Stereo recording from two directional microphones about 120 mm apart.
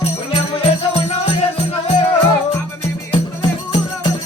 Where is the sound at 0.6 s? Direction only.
55° left (ahead or behind).